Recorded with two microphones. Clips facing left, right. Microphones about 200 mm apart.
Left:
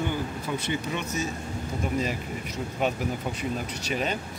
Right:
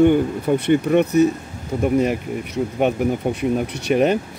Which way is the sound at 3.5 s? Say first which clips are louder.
Right 11 dB; 60° right (ahead or behind).